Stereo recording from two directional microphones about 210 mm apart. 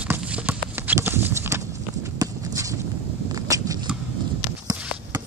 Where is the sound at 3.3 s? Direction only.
15° right (ahead or behind).